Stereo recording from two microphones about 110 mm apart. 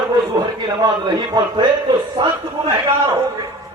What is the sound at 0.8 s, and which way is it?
A man's voice, 40° right (ahead or behind).